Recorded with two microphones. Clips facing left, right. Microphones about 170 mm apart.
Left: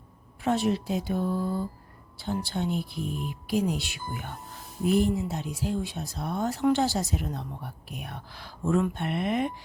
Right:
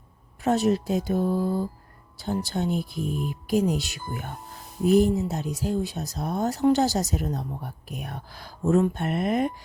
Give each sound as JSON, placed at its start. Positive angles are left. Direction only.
{"t": 0.4, "sound": "speech", "side_deg": -40}